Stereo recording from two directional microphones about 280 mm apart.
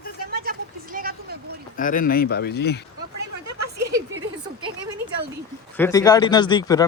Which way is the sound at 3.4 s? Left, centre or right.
Right.